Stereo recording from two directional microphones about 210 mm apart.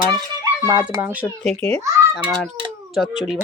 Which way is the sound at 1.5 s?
30° right (ahead or behind).